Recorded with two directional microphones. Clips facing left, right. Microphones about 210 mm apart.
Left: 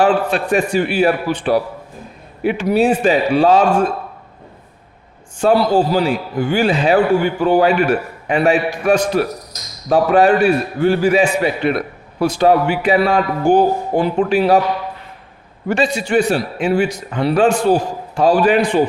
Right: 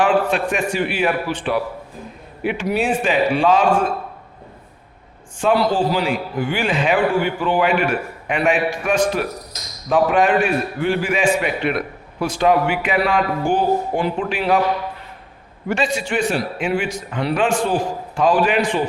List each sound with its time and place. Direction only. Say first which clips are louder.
0.0 s speech: left 2 dB; 35° left (ahead or behind)
5.4 s speech: left 4 dB; 40° left (ahead or behind)
15.7 s speech: left 5 dB; 40° left (ahead or behind)